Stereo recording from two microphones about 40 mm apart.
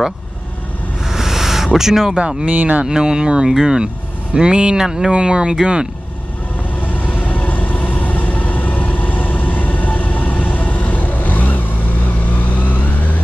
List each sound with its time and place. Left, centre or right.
1.0 s a sound: centre
1.8 s speech: centre
2.1 s speech: right
2.5 s speech: right
2.8 s speech: right
6.9 s music: left
12.4 s vehicle: left